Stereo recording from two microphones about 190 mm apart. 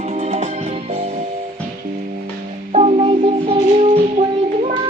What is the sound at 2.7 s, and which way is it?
Music, 30° right (ahead or behind).